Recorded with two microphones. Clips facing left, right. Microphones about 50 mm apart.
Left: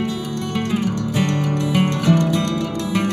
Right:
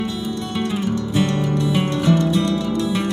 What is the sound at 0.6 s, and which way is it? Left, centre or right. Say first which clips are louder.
Music: left 1 dB; left.